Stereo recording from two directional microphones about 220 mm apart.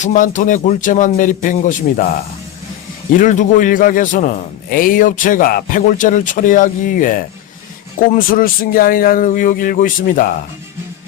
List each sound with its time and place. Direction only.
0.0 s a man's voice: 35° left (ahead or behind)
3.1 s a man's voice: 35° left (ahead or behind)